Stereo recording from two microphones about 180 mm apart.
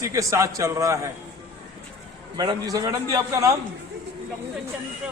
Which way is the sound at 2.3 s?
20° right (ahead or behind).